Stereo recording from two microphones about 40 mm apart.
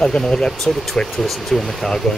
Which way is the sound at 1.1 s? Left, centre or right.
Centre.